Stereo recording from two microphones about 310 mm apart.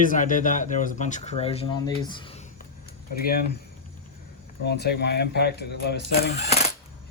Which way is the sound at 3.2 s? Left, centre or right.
Left.